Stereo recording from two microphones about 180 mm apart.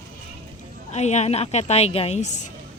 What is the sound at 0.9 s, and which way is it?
A woman's voice, 40° left (ahead or behind).